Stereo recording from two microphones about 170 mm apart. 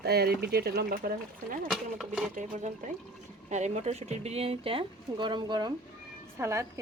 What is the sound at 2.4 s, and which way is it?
A woman's voice, 45° right (ahead or behind).